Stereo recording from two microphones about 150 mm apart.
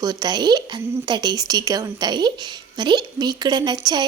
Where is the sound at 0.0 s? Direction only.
25° right (ahead or behind).